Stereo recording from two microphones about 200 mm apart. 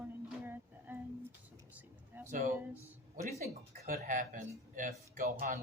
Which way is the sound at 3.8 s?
40° right (ahead or behind).